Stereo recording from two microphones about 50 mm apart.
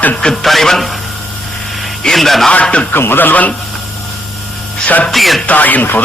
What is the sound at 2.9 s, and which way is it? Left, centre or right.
Speech, left.